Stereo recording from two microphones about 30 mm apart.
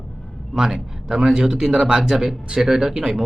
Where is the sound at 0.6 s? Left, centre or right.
Centre.